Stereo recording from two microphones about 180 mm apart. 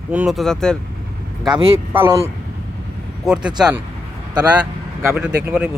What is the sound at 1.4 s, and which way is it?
Speech, 25° right (ahead or behind).